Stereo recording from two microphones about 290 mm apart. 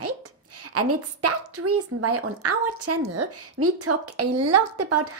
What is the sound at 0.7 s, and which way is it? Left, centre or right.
A woman's voice, right.